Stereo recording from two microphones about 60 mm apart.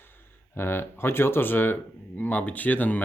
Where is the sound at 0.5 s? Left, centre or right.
Left.